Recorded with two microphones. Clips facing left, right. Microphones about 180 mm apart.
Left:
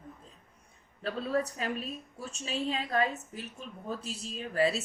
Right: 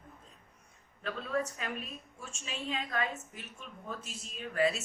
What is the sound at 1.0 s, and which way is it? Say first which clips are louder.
A woman's voice: left 3 dB; 35° left (ahead or behind).